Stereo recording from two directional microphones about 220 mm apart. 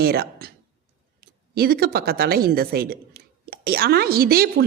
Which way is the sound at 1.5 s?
45° right (ahead or behind).